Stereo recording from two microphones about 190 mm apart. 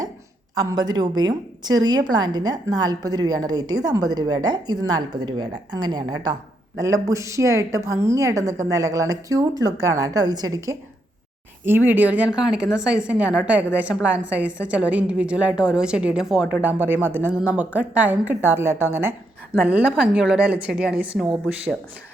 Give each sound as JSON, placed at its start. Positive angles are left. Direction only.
{"t": 0.5, "sound": "a woman's voice", "side_deg": -20}